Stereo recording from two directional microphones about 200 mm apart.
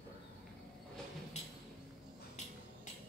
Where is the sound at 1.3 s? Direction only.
35° left (ahead or behind).